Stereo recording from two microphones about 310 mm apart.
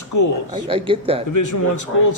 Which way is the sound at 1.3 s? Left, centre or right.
Left.